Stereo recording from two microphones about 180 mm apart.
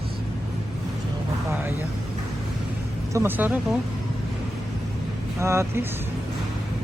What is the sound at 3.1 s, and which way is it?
Speech, 10° right (ahead or behind).